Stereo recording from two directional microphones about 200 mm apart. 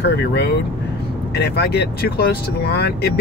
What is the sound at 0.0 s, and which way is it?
Speech, 55° left (ahead or behind).